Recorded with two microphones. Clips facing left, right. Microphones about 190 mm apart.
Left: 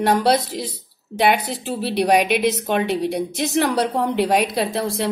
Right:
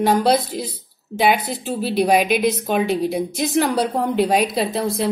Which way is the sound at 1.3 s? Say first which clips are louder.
Even; 75° left (ahead or behind).